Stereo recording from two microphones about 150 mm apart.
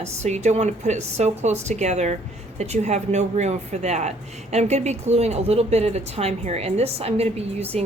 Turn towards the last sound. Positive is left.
turn(degrees=-45)  # may be behind; listen again after turning